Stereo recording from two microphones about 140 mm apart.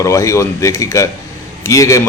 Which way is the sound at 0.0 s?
20° left (ahead or behind).